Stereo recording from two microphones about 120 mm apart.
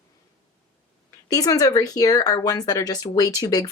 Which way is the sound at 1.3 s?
30° left (ahead or behind).